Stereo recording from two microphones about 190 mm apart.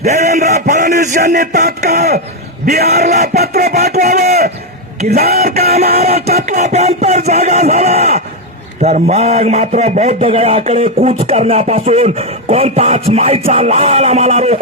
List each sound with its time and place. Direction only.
0.0 s a man's voice: 35° right (ahead or behind)
2.6 s speech: 55° right (ahead or behind)
2.9 s a man's voice: 35° right (ahead or behind)
3.3 s a sound: 55° right (ahead or behind)
3.9 s speech: 55° right (ahead or behind)
4.9 s a sound: 50° right (ahead or behind)
5.7 s a man's voice: 35° right (ahead or behind)